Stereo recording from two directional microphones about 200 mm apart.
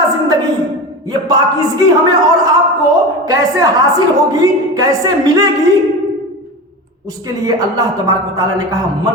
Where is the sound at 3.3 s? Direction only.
15° right (ahead or behind).